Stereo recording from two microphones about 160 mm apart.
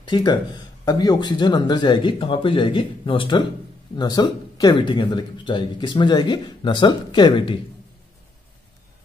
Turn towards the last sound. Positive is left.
turn(degrees=30)  # may be behind; listen again after turning